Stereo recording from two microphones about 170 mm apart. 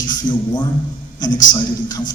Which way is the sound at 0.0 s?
25° left (ahead or behind).